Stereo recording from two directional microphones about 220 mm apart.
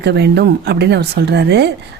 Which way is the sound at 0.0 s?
50° right (ahead or behind).